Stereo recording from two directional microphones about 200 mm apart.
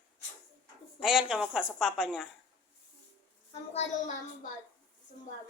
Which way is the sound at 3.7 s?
30° left (ahead or behind).